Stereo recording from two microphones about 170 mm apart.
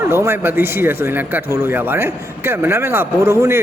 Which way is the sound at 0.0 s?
15° right (ahead or behind).